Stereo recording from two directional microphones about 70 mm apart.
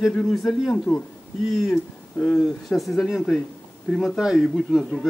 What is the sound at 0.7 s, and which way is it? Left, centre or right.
Speech, left.